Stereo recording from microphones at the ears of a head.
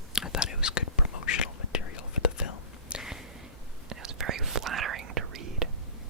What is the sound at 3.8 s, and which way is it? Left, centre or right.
Whispering, right.